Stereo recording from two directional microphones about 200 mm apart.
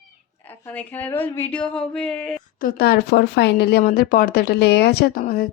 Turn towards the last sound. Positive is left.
turn(degrees=45)  # may be behind; listen again after turning